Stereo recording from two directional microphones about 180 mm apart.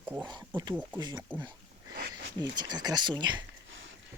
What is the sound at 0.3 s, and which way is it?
Speech, 25° right (ahead or behind).